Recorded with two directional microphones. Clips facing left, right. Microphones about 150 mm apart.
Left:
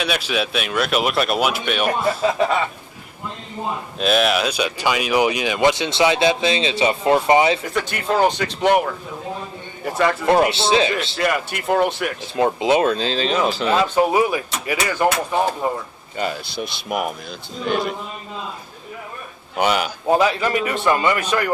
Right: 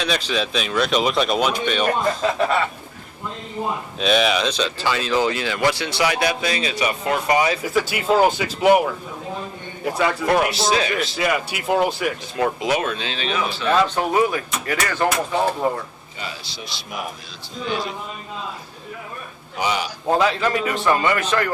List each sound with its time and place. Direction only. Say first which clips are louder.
0.0 s speech: left 1 dB; 10° left (ahead or behind)
4.0 s speech: left 1 dB; centre (ahead or behind); by 7.6 s 25° left (ahead or behind)
7.6 s speech: right 3 dB; 5° right (ahead or behind)
9.8 s speech: left 1 dB; centre (ahead or behind)
10.2 s speech: left 3 dB; 30° left (ahead or behind)
11.1 s speech: left 1 dB; centre (ahead or behind)
12.4 s speech: left 5 dB; 25° left (ahead or behind)
12.9 s speech: left 6 dB; 35° left (ahead or behind)
13.8 s speech: left 2 dB; 10° left (ahead or behind)
16.1 s speech: left 9 dB; 50° left (ahead or behind)
19.5 s speech: left 4 dB; 65° left (ahead or behind)
20.1 s speech: left 1 dB; 10° left (ahead or behind)